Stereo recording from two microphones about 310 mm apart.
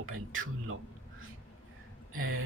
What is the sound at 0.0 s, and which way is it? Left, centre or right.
Speech, right.